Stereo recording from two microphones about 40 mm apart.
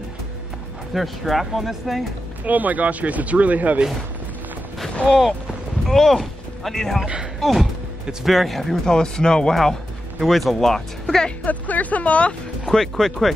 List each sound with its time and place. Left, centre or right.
0.9 s speech: centre
2.4 s speech: right
5.0 s speech: centre
5.9 s speech: centre
8.8 s speech: centre
10.2 s speech: centre
11.4 s speech: left
12.6 s speech: centre